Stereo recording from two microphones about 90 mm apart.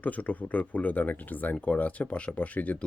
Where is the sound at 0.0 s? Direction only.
15° left (ahead or behind).